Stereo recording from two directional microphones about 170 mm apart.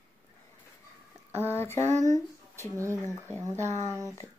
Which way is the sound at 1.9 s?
45° right (ahead or behind).